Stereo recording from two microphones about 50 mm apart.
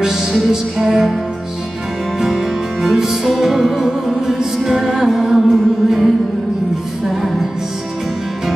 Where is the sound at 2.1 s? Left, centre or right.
Centre.